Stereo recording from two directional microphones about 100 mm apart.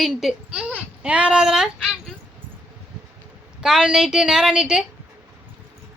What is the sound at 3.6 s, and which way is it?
A woman's voice, 5° right (ahead or behind).